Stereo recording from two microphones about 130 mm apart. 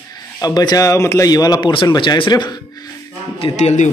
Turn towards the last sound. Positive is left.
turn(degrees=60)  # may be behind; listen again after turning